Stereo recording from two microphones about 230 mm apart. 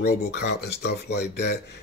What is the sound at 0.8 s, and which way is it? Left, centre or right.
Speech, left.